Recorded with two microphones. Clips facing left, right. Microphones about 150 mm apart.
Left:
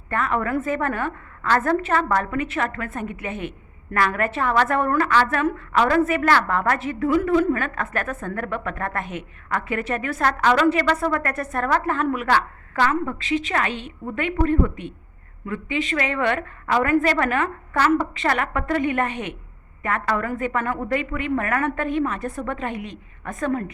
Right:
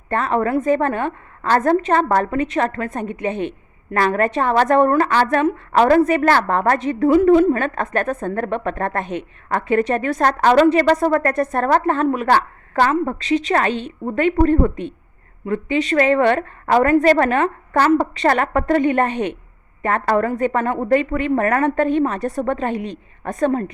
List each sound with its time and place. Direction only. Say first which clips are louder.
0.1 s a woman's voice: right 5 dB; 30° right (ahead or behind)
1.4 s a woman's voice: right 4 dB; 35° right (ahead or behind)